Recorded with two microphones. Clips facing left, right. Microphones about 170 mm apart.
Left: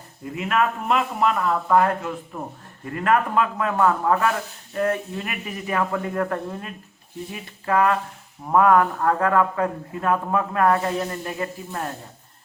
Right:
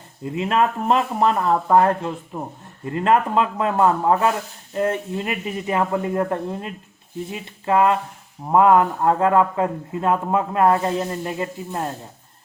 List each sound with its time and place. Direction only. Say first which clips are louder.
0.3 s speech: right 3 dB; 30° right (ahead or behind)